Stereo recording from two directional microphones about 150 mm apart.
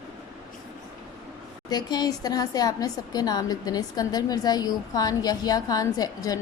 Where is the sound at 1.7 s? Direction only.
25° left (ahead or behind).